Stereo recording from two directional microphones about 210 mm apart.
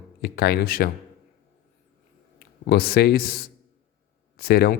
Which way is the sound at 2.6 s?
50° left (ahead or behind).